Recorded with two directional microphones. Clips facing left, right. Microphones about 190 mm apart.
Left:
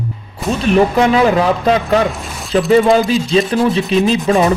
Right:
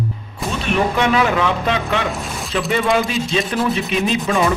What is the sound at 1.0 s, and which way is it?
Speech, 30° left (ahead or behind).